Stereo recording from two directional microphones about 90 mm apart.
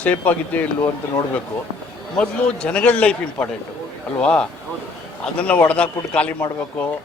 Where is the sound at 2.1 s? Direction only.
10° left (ahead or behind).